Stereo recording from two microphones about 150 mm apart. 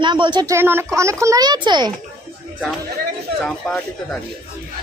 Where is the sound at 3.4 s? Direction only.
5° left (ahead or behind).